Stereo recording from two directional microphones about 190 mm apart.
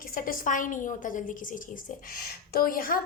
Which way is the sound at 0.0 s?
50° left (ahead or behind).